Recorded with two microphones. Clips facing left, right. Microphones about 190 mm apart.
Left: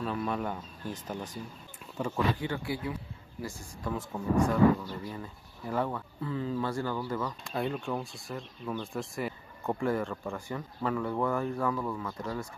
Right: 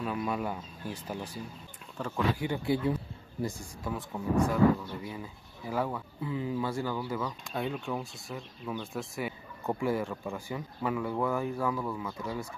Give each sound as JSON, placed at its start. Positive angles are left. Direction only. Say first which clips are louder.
{"t": 0.0, "sound": "speech", "louder": "even", "side_deg": -10}
{"t": 2.0, "sound": "speech", "louder": "left 2 dB", "side_deg": 10}
{"t": 2.3, "sound": "speech", "louder": "right 4 dB", "side_deg": -15}
{"t": 3.8, "sound": "speech", "louder": "left 1 dB", "side_deg": 0}